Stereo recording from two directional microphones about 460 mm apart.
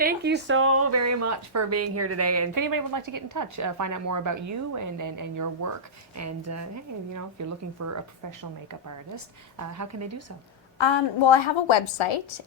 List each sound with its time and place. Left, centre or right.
0.0 s speech: right
9.1 s speech: right
10.8 s a woman's voice: left